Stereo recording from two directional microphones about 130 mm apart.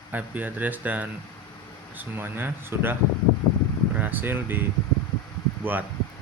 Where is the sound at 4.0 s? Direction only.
15° right (ahead or behind).